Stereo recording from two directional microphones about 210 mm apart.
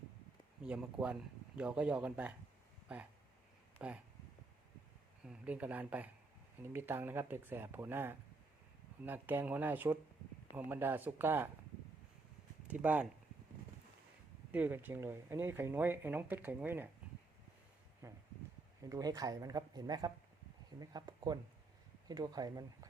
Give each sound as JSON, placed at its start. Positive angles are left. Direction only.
{"t": 0.6, "sound": "speech", "side_deg": -5}
{"t": 3.8, "sound": "speech", "side_deg": -5}
{"t": 5.2, "sound": "speech", "side_deg": -5}
{"t": 12.6, "sound": "speech", "side_deg": -5}
{"t": 14.5, "sound": "speech", "side_deg": -10}
{"t": 18.0, "sound": "a sound", "side_deg": -15}
{"t": 18.8, "sound": "speech", "side_deg": -15}